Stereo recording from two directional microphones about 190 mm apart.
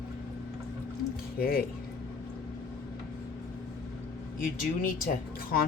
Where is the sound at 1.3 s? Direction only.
50° left (ahead or behind).